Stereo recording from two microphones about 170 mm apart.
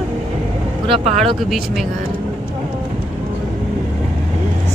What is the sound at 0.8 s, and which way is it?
Speech, 40° right (ahead or behind).